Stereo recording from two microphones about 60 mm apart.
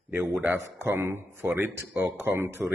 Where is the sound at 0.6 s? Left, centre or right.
Right.